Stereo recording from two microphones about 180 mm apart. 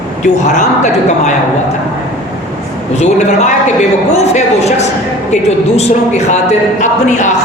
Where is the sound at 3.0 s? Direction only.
40° left (ahead or behind).